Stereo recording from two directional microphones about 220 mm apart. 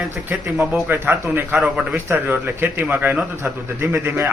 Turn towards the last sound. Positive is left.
turn(degrees=-10)  # may be behind; listen again after turning